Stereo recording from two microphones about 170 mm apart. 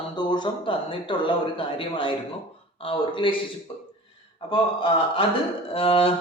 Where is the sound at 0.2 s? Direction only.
25° left (ahead or behind).